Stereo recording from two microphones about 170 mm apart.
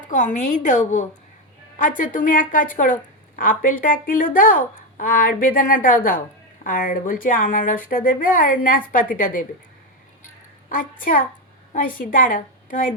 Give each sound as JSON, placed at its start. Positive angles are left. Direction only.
{"t": 0.1, "sound": "a woman's voice", "side_deg": 45}
{"t": 10.7, "sound": "a woman's voice", "side_deg": 55}